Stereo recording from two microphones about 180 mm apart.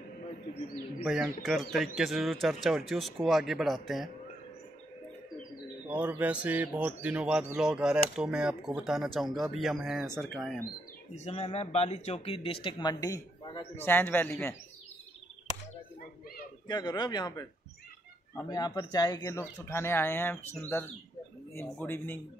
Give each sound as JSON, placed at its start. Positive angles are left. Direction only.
{"t": 1.0, "sound": "speech", "side_deg": 0}
{"t": 5.9, "sound": "speech", "side_deg": -5}
{"t": 11.1, "sound": "speech", "side_deg": 35}
{"t": 16.6, "sound": "speech", "side_deg": 25}
{"t": 18.5, "sound": "speech", "side_deg": 20}